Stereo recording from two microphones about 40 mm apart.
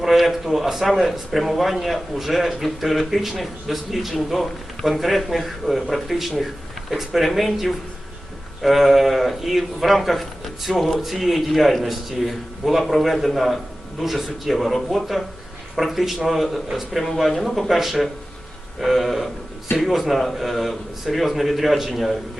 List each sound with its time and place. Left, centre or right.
0.0 s a man's voice: centre